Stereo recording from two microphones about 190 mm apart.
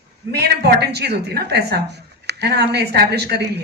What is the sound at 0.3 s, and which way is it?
Speech, 60° right (ahead or behind).